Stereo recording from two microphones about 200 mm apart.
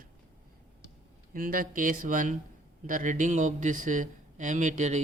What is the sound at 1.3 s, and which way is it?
Speech, 45° right (ahead or behind).